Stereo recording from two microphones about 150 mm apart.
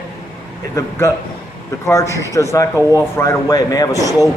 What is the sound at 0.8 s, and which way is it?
A man's voice, 20° left (ahead or behind).